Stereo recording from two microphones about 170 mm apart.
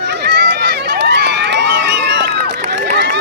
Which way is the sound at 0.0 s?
80° right.